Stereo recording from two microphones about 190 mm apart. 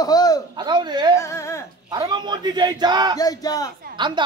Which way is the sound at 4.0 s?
25° right (ahead or behind).